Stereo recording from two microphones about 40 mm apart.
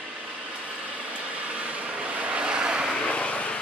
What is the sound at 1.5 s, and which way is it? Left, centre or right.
Vehicle, right.